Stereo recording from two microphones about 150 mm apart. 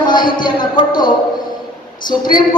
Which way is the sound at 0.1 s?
30° left (ahead or behind).